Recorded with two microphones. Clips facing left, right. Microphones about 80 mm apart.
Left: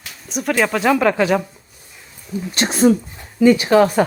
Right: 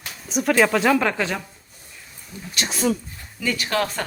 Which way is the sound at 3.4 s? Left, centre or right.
Left.